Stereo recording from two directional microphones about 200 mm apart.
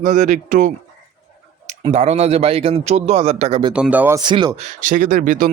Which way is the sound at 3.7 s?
5° right (ahead or behind).